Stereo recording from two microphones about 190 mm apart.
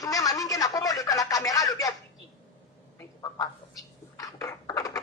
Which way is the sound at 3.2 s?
20° left (ahead or behind).